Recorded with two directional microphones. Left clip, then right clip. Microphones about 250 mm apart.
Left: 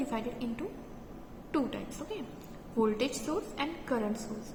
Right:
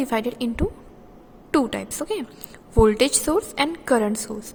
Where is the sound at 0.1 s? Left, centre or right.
Right.